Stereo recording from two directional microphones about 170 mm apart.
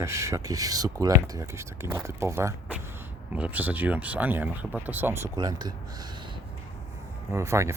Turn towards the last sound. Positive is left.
turn(degrees=-15)  # may be behind; listen again after turning